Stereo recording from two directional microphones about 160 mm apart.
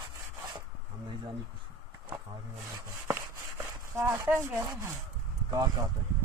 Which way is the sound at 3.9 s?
15° right (ahead or behind).